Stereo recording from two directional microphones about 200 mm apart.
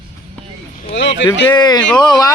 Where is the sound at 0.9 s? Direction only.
65° left (ahead or behind).